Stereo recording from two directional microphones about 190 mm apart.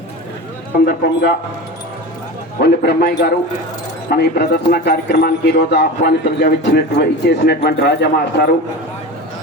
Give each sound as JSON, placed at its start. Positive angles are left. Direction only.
{"t": 0.9, "sound": "a man's voice", "side_deg": 55}
{"t": 2.6, "sound": "a man's voice", "side_deg": 55}